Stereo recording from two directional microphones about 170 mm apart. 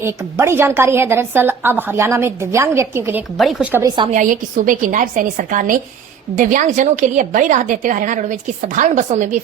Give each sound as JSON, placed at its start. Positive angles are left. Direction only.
{"t": 0.0, "sound": "a woman's voice", "side_deg": -15}
{"t": 3.3, "sound": "speech", "side_deg": 0}
{"t": 3.8, "sound": "a woman's voice", "side_deg": -25}
{"t": 4.1, "sound": "a woman's voice", "side_deg": -50}